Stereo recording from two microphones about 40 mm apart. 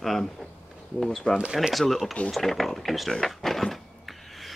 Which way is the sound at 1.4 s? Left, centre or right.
Right.